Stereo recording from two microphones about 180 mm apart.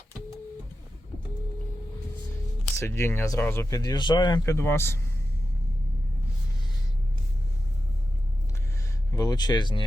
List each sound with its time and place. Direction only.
2.7 s speech: 15° left (ahead or behind)
9.1 s speech: 20° left (ahead or behind)